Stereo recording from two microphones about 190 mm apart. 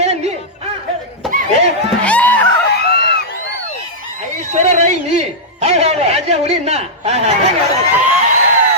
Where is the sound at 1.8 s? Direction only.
5° left (ahead or behind).